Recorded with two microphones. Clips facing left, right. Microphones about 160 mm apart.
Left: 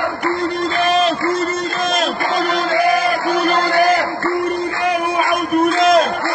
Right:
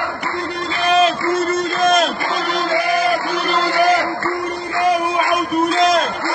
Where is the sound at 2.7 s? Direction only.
Centre (ahead or behind).